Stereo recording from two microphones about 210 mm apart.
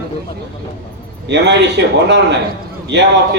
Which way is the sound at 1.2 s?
55° right (ahead or behind).